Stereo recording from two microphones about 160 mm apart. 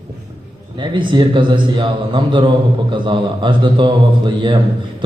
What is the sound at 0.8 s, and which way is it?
A man's voice, 30° right (ahead or behind).